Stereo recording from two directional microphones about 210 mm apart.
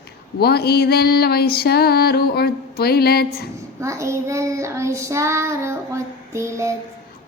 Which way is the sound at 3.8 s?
15° right (ahead or behind).